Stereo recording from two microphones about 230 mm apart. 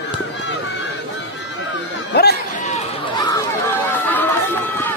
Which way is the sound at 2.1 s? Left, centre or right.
Left.